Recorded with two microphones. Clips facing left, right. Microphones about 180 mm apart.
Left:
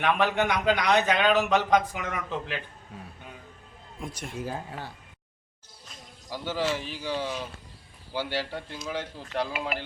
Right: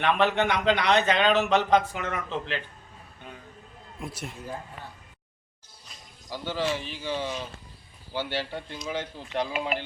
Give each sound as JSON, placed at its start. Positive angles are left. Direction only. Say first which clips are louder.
{"t": 0.0, "sound": "a man's voice", "louder": "right 1 dB", "side_deg": 10}
{"t": 4.0, "sound": "speech", "louder": "right 1 dB", "side_deg": -5}
{"t": 4.4, "sound": "speech", "louder": "left 4 dB", "side_deg": 90}
{"t": 6.3, "sound": "a man's voice", "louder": "even", "side_deg": 5}